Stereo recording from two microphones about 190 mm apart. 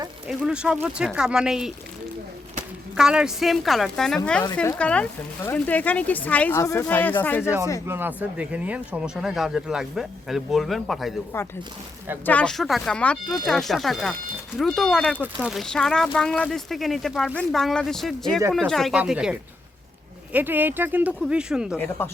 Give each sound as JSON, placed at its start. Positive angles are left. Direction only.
{"t": 0.3, "sound": "speech", "side_deg": -5}
{"t": 2.9, "sound": "speech", "side_deg": -5}
{"t": 7.9, "sound": "speech", "side_deg": -10}
{"t": 11.3, "sound": "speech", "side_deg": 10}
{"t": 21.8, "sound": "speech", "side_deg": 10}